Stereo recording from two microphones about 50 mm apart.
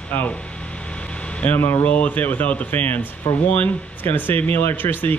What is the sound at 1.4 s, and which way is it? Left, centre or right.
Speech, left.